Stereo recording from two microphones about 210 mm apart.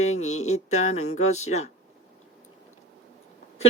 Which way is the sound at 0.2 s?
85° left.